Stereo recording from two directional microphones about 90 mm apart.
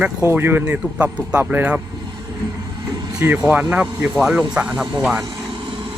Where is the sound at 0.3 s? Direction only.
25° right (ahead or behind).